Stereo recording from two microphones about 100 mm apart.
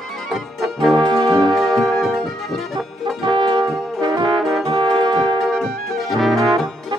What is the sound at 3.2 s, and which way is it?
Brass instrument, 50° right (ahead or behind).